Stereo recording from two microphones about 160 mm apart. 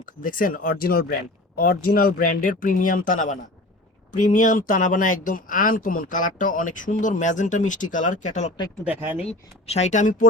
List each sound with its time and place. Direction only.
0.0 s speech: 60° left (ahead or behind)
8.8 s speech: 10° right (ahead or behind)
9.6 s speech: 45° left (ahead or behind)